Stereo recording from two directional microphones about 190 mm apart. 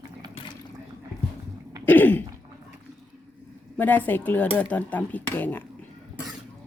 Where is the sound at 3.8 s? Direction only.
10° left (ahead or behind).